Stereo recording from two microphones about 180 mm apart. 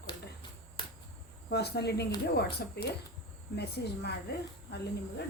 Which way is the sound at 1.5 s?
65° left (ahead or behind).